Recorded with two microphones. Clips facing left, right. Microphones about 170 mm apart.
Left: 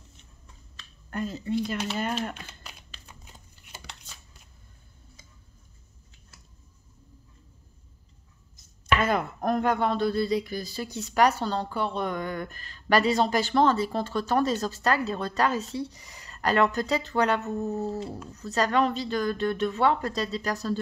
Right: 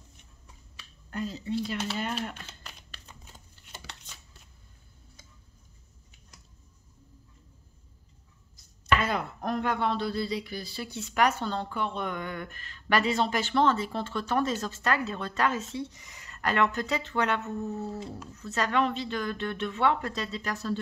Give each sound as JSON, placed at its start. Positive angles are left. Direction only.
{"t": 1.1, "sound": "speech", "side_deg": 50}
{"t": 2.3, "sound": "shuffling cards", "side_deg": 10}
{"t": 3.3, "sound": "a sound", "side_deg": 0}
{"t": 9.0, "sound": "speech", "side_deg": 50}